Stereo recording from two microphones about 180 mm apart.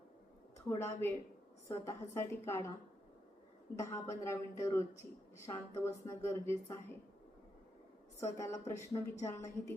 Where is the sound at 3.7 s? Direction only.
15° left (ahead or behind).